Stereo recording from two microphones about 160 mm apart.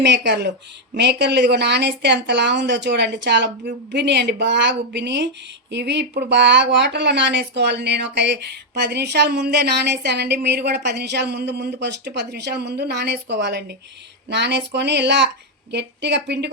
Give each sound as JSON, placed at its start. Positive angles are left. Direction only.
{"t": 0.0, "sound": "speech", "side_deg": -90}